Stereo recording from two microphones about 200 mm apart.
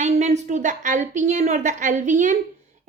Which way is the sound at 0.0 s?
35° right (ahead or behind).